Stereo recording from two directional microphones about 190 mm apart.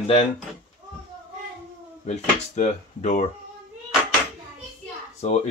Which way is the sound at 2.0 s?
35° left (ahead or behind).